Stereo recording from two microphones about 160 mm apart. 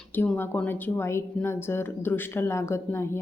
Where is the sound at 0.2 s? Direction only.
10° left (ahead or behind).